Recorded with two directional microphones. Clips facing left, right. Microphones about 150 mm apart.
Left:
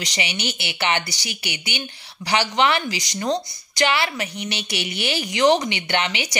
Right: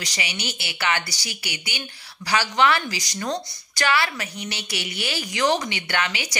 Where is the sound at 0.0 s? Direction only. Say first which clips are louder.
Left 4 dB; 25° left (ahead or behind).